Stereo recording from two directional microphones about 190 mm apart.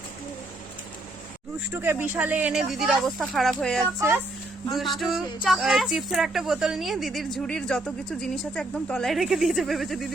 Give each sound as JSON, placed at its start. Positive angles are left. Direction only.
{"t": 1.7, "sound": "speech", "side_deg": -10}